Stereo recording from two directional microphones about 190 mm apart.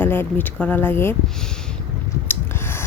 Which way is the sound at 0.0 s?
10° left (ahead or behind).